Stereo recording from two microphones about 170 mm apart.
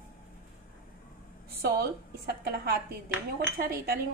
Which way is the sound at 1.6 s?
65° right (ahead or behind).